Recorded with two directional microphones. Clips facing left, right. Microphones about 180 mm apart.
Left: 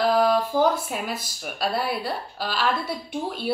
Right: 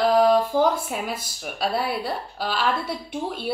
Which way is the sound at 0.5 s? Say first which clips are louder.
Right 1 dB; 10° left (ahead or behind).